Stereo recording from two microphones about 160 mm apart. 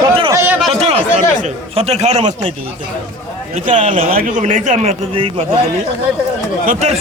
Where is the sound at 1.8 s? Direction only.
45° right (ahead or behind).